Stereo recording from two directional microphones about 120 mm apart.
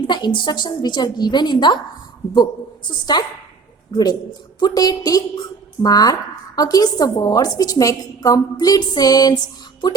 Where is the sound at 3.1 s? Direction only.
35° left (ahead or behind).